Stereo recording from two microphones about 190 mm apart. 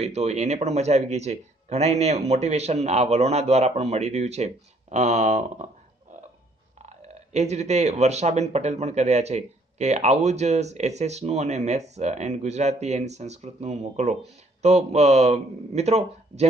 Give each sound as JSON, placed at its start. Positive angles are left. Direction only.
{"t": 0.0, "sound": "speech", "side_deg": -35}
{"t": 6.9, "sound": "speech", "side_deg": -35}